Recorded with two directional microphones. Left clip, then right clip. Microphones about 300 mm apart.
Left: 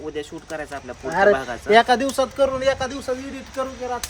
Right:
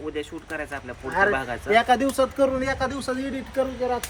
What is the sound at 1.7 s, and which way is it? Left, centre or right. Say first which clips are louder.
Speech: left 4 dB; left.